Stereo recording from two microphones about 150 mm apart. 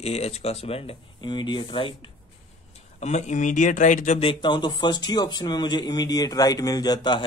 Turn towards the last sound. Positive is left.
turn(degrees=30)  # may be behind; listen again after turning